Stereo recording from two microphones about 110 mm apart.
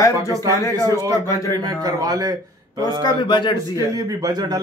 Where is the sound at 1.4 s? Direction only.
35° right (ahead or behind).